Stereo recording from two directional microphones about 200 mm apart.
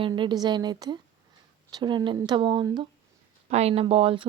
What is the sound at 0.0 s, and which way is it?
Speech, 25° right (ahead or behind).